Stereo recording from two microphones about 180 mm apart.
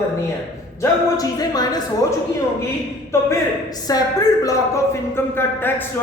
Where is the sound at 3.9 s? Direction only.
20° left (ahead or behind).